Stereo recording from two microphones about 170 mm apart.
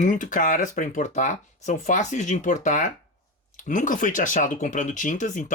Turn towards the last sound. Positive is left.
turn(degrees=50)  # may be behind; listen again after turning